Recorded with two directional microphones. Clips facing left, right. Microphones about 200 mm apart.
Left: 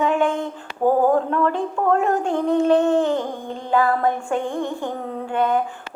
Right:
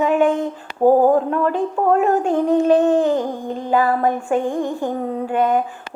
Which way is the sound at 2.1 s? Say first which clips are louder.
Right 3 dB; 35° right (ahead or behind).